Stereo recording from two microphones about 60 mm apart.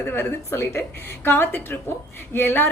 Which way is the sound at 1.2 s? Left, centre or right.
Left.